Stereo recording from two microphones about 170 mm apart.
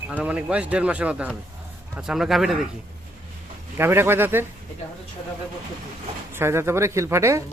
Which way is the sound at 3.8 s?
15° right (ahead or behind).